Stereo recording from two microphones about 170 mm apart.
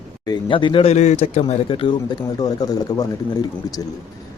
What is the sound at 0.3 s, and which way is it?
Speech, 30° left (ahead or behind).